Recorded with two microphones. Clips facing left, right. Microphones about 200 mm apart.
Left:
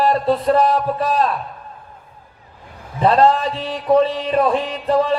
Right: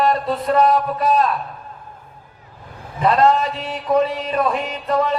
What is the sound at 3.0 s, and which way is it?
Speech, 30° left (ahead or behind).